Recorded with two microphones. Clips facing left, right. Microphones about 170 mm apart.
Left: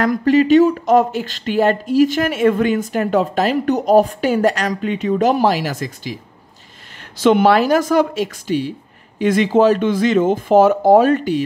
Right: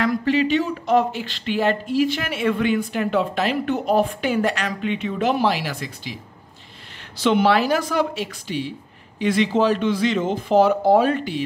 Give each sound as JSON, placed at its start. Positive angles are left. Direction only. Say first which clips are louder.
{"t": 0.0, "sound": "speech", "louder": "left 5 dB", "side_deg": 45}
{"t": 7.2, "sound": "speech", "louder": "left 5 dB", "side_deg": 50}